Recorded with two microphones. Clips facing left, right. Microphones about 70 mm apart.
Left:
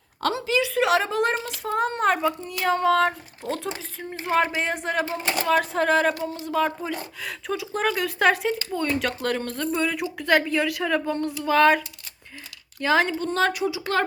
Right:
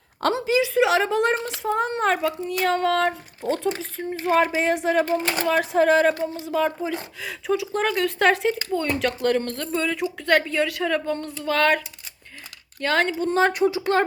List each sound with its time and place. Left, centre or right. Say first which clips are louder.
0.2 s a woman's voice: right 3 dB; right
0.6 s speech: right 1 dB; centre
2.5 s a sound: even; centre
3.4 s speech: right 5 dB; centre
5.1 s a sound: right 4 dB; centre
5.5 s speech: right 3 dB; centre
12.8 s a sound: left 1 dB; centre
13.1 s speech: right 3 dB; centre
13.5 s speech: right 5 dB; right